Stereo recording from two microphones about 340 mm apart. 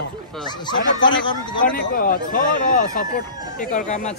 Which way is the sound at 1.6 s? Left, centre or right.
Left.